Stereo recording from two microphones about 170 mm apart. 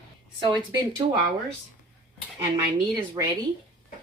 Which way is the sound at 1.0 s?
35° right (ahead or behind).